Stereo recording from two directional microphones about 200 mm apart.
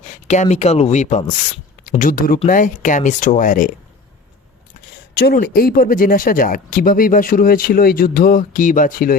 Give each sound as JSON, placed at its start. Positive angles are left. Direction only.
{"t": 0.3, "sound": "speech", "side_deg": 35}
{"t": 5.1, "sound": "speech", "side_deg": 50}